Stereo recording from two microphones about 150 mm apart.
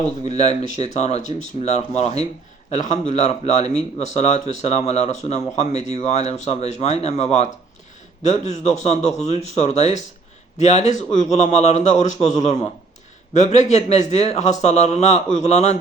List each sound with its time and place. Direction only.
0.3 s a man's voice: 45° left (ahead or behind)